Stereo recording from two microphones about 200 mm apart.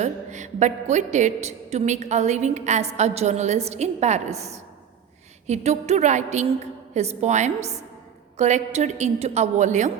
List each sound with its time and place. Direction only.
0.0 s a woman's voice: 35° right (ahead or behind)